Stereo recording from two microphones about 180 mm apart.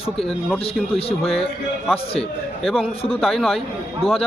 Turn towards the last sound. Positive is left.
turn(degrees=30)  # may be behind; listen again after turning